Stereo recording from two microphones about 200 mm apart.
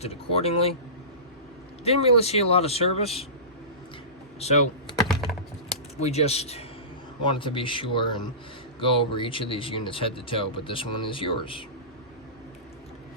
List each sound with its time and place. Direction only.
0.0 s speech: 30° left (ahead or behind)
1.8 s speech: 30° left (ahead or behind)
4.4 s a sound: 30° left (ahead or behind)
4.9 s computer keyboard: centre (ahead or behind)
6.0 s speech: 30° left (ahead or behind)